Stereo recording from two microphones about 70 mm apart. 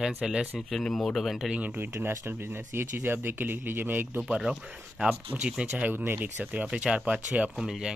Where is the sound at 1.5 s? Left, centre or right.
Centre.